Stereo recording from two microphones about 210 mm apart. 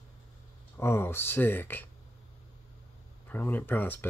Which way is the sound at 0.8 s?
10° left (ahead or behind).